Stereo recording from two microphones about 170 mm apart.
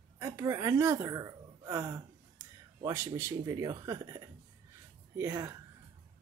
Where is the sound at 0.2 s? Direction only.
15° right (ahead or behind).